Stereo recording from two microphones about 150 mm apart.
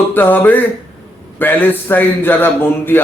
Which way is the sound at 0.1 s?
10° left (ahead or behind).